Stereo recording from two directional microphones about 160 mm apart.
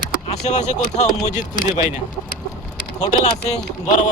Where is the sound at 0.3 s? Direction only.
45° left (ahead or behind).